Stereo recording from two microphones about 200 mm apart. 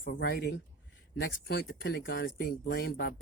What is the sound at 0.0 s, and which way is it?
Speech, 50° left (ahead or behind).